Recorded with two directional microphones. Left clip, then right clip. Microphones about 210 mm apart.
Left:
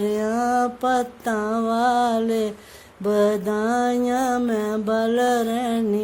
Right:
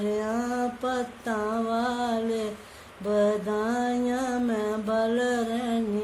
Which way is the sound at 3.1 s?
50° left (ahead or behind).